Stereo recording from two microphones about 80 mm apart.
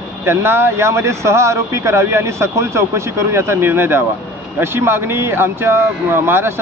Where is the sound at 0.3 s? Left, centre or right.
Right.